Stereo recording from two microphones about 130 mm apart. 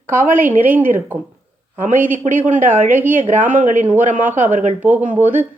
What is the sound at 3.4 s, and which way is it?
Speech, 80° right.